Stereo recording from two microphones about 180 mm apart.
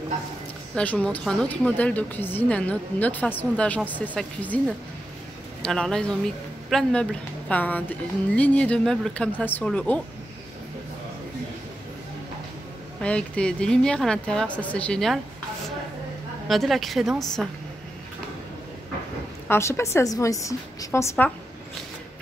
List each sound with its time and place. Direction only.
0.7 s a woman's voice: 5° left (ahead or behind)
13.0 s a woman's voice: 5° left (ahead or behind)
16.4 s a woman's voice: centre (ahead or behind)
19.4 s a woman's voice: 15° left (ahead or behind)